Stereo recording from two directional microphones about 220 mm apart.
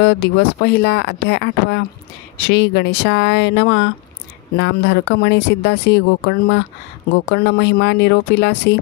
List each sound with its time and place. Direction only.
0.0 s speech: 50° left (ahead or behind)